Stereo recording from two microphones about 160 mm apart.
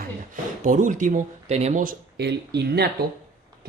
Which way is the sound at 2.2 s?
90° right.